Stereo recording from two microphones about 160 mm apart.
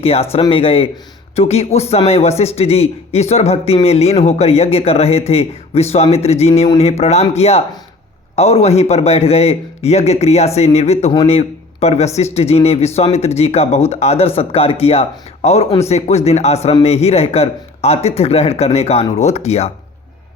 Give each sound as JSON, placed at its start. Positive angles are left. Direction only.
{"t": 0.0, "sound": "a man's voice", "side_deg": 40}